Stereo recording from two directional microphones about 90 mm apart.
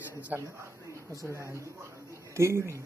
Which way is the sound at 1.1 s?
35° right (ahead or behind).